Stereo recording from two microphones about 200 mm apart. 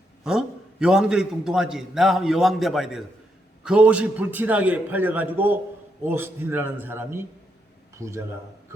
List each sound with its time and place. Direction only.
0.3 s a man's voice: 5° right (ahead or behind)